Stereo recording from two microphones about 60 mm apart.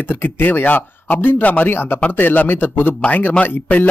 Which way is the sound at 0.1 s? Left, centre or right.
Left.